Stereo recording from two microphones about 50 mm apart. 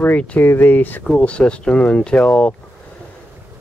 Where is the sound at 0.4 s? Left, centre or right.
Left.